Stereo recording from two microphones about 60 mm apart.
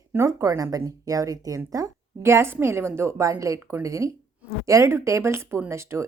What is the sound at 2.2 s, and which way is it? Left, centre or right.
Speech, right.